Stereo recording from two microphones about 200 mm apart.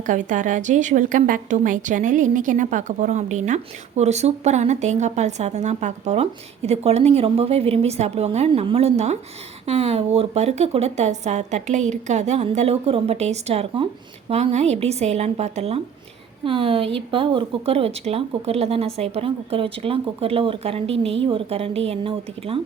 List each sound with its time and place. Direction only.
0.0 s a woman's voice: 40° right (ahead or behind)